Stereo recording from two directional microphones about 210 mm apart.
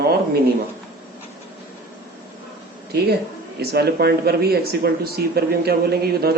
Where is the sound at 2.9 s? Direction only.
50° right (ahead or behind).